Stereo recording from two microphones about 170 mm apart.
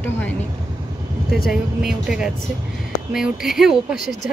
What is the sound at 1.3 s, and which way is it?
Speech, centre (ahead or behind).